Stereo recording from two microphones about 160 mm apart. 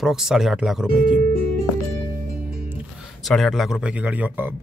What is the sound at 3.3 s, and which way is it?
Speech, centre (ahead or behind).